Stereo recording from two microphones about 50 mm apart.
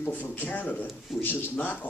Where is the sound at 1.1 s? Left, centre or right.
Centre.